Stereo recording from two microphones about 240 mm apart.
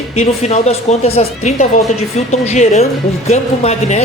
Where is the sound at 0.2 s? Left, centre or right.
Left.